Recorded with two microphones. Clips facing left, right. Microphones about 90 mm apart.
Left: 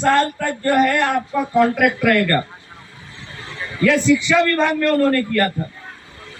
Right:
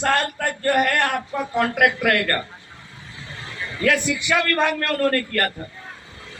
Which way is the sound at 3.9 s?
60° right (ahead or behind).